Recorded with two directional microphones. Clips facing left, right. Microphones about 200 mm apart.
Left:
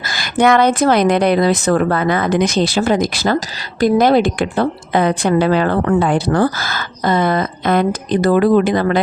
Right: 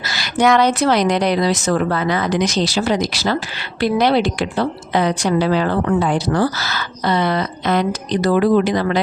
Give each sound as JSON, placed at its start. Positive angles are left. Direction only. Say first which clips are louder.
{"t": 0.1, "sound": "a woman's voice", "louder": "left 2 dB", "side_deg": 55}